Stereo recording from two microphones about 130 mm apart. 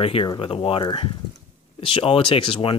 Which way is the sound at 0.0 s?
40° left (ahead or behind).